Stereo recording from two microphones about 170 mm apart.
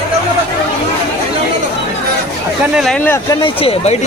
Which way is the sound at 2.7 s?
Centre (ahead or behind).